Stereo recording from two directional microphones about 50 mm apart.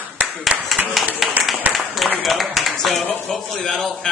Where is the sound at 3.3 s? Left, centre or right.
Centre.